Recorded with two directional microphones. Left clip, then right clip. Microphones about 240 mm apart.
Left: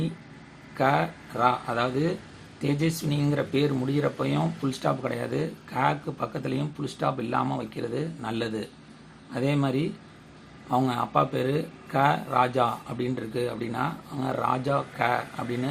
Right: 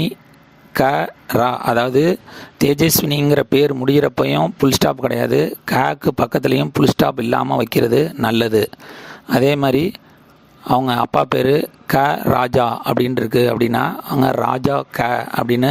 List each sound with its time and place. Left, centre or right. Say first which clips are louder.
0.7 s speech: right 8 dB; right